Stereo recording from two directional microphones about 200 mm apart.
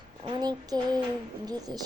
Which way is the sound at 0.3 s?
20° right (ahead or behind).